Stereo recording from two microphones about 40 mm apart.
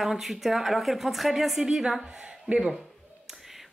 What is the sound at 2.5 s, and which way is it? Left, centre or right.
Speech, right.